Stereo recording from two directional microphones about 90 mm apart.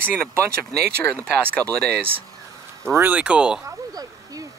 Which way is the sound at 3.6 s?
40° right (ahead or behind).